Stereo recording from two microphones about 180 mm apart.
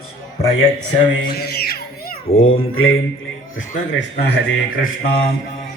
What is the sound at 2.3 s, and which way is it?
Speech, 35° left (ahead or behind).